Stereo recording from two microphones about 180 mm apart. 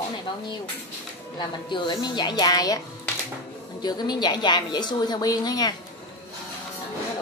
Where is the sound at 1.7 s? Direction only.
25° left (ahead or behind).